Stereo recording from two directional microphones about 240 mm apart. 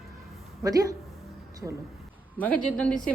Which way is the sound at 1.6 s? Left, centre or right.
Centre.